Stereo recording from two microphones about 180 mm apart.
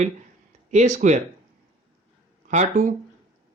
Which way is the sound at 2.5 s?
40° right (ahead or behind).